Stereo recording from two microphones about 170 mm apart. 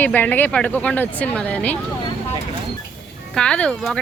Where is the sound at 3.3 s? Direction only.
5° left (ahead or behind).